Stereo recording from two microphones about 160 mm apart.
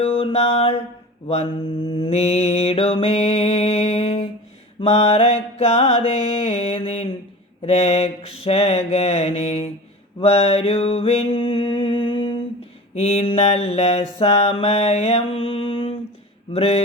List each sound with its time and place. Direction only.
0.0 s mantra: 35° left (ahead or behind)
2.0 s mantra: 40° left (ahead or behind)